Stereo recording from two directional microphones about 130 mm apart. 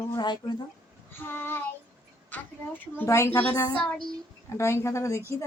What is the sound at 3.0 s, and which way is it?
Speech, 20° left (ahead or behind).